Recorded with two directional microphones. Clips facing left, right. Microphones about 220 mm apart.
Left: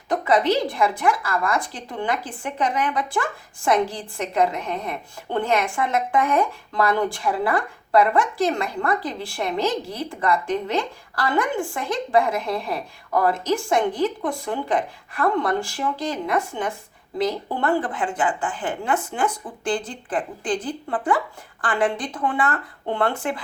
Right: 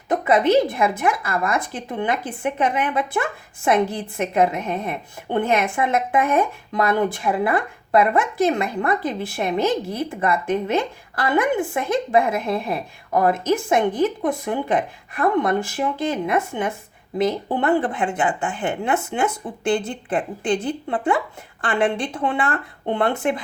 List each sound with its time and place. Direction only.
0.1 s speech: 20° right (ahead or behind)